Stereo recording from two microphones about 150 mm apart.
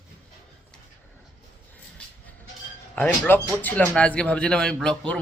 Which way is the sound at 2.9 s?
10° left (ahead or behind).